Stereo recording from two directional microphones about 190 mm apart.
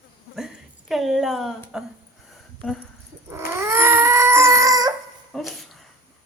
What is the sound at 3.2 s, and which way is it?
Dog, 15° right (ahead or behind).